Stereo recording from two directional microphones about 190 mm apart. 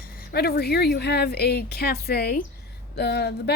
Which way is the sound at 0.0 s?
55° left (ahead or behind).